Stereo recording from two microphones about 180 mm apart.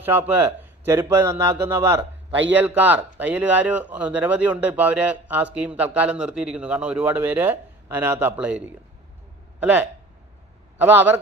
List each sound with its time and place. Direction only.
0.0 s speech: 10° right (ahead or behind)